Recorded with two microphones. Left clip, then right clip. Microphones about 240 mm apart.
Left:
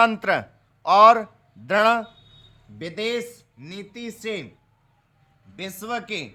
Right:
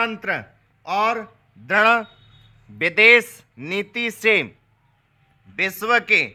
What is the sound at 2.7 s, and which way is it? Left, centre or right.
Speech, right.